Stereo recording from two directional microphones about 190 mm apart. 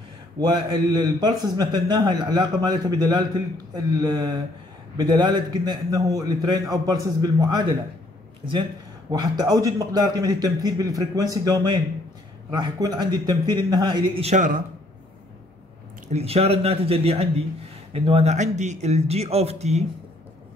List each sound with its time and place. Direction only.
0.4 s a man's voice: 25° right (ahead or behind)
9.2 s a man's voice: 20° right (ahead or behind); by 14.6 s 40° right (ahead or behind)
16.1 s speech: 35° right (ahead or behind)